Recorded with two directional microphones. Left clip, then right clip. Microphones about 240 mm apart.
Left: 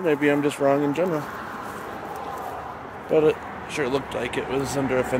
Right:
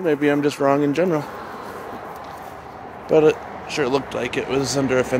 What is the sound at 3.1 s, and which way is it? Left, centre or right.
Speech, right.